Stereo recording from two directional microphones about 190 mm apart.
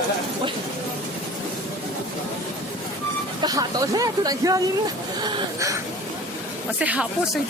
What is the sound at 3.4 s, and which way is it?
Speech, 20° right (ahead or behind).